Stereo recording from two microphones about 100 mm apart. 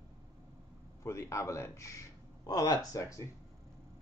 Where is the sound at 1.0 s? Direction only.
30° left (ahead or behind).